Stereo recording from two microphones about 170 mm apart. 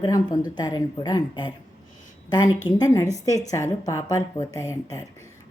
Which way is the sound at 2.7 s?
25° left (ahead or behind).